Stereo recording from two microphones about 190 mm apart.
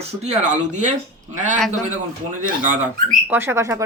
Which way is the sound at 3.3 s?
10° right (ahead or behind).